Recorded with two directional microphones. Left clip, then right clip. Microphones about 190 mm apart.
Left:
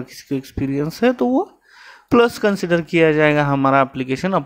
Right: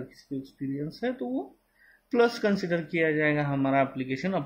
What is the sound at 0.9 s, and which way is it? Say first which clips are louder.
Speech: left 16 dB; 35° left (ahead or behind).